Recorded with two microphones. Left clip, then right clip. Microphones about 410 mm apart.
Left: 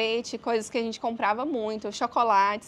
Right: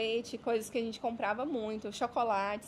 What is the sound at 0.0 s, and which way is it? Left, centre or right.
A woman's voice, left.